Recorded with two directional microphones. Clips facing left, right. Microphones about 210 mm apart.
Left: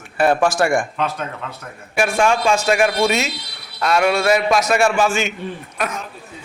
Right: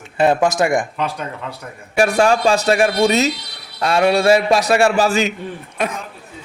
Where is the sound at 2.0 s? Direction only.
35° right (ahead or behind).